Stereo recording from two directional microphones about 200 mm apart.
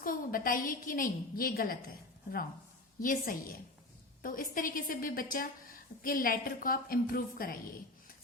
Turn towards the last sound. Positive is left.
turn(degrees=45)  # may be behind; listen again after turning